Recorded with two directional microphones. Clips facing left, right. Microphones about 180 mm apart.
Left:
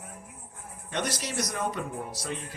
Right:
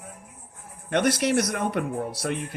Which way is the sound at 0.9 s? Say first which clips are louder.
Right 10 dB; 60° right (ahead or behind).